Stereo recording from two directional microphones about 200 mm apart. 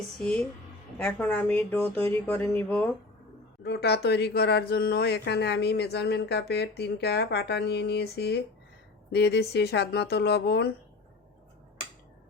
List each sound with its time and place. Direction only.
0.2 s a woman's voice: 5° left (ahead or behind)
3.6 s speech: 55° left (ahead or behind)